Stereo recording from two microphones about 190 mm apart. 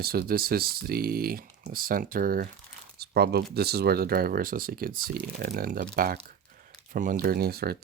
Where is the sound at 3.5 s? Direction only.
55° right (ahead or behind).